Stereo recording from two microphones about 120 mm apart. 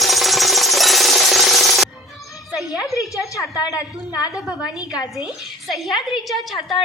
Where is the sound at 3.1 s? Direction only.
25° left (ahead or behind).